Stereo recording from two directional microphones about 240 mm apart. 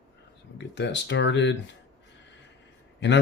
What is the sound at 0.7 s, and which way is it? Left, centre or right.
Speech, left.